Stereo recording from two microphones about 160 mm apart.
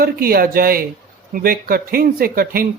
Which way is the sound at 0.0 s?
70° right (ahead or behind).